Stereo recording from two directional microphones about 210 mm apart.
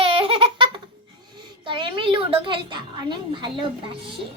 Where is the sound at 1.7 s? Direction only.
25° right (ahead or behind).